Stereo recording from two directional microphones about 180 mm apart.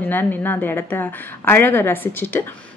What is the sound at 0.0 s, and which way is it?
A woman's voice, 10° left (ahead or behind).